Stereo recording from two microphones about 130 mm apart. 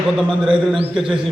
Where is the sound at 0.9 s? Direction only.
5° right (ahead or behind).